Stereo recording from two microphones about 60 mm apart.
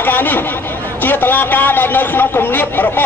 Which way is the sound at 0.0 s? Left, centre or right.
Left.